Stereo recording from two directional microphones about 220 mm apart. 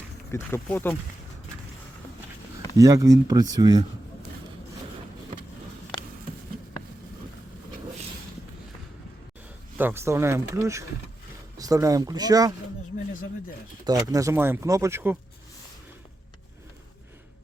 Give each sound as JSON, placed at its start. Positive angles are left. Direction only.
{"t": 0.3, "sound": "speech", "side_deg": 10}
{"t": 2.7, "sound": "speech", "side_deg": -15}
{"t": 9.7, "sound": "speech", "side_deg": -10}
{"t": 13.8, "sound": "speech", "side_deg": -15}